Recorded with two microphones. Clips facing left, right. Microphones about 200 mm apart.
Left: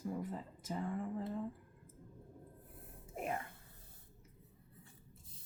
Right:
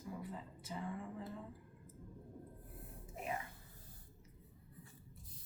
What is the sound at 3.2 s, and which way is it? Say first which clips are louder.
Speech: left 3 dB; 50° left (ahead or behind).